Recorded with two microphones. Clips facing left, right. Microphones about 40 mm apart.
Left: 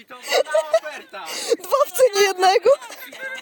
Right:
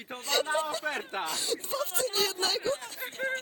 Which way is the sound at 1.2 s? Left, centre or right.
Left.